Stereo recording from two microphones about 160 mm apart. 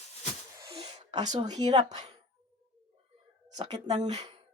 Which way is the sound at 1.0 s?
45° right (ahead or behind).